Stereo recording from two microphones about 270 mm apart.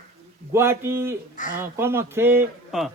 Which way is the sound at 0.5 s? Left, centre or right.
Centre.